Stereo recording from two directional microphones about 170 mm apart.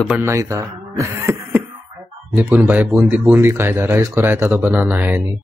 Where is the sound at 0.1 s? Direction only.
15° right (ahead or behind).